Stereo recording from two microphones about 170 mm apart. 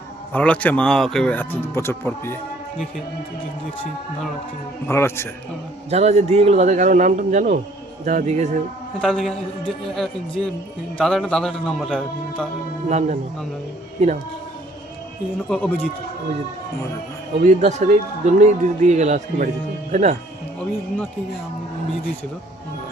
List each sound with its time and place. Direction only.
0.3 s speech: 10° left (ahead or behind)
4.9 s speech: 15° left (ahead or behind)
5.9 s a man's voice: 40° right (ahead or behind)
9.0 s a man's voice: centre (ahead or behind)
12.9 s a man's voice: 40° right (ahead or behind)
15.4 s speech: 5° left (ahead or behind)
17.4 s a man's voice: 45° right (ahead or behind)